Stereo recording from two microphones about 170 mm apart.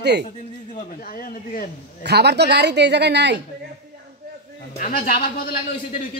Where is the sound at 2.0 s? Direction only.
75° right (ahead or behind).